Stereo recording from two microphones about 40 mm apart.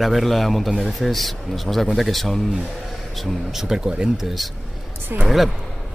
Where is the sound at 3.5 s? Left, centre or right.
Centre.